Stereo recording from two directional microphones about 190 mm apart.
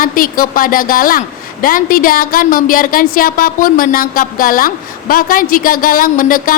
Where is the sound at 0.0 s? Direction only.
45° left (ahead or behind).